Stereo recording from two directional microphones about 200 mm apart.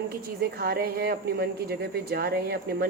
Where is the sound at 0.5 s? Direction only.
50° right (ahead or behind).